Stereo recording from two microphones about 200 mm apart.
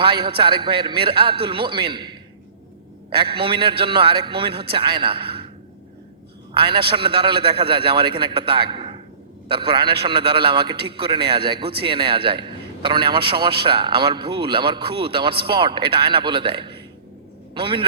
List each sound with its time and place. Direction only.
0.0 s a man's voice: 25° right (ahead or behind)
3.3 s a man's voice: 25° right (ahead or behind)
6.6 s a man's voice: 25° right (ahead or behind)